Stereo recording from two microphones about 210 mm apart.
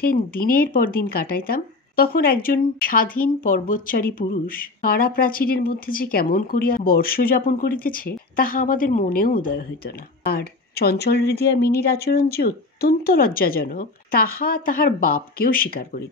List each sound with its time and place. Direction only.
0.0 s speech: 45° left (ahead or behind)